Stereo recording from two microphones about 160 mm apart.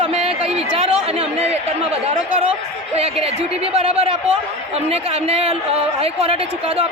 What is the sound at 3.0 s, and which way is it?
A woman's voice, 40° right (ahead or behind).